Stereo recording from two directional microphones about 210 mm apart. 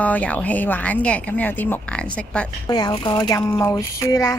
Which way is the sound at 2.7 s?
20° left (ahead or behind).